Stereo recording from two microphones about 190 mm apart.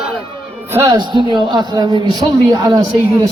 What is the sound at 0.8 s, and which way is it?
A man's voice, 20° right (ahead or behind).